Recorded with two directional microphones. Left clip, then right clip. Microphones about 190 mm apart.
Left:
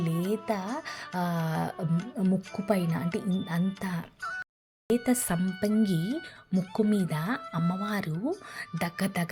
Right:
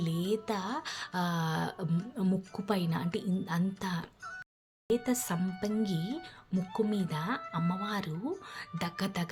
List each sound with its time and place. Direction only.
0.1 s music: 45° left (ahead or behind)
0.4 s speech: 10° left (ahead or behind)
4.2 s a sound: 40° left (ahead or behind)
4.9 s speech: 25° left (ahead or behind)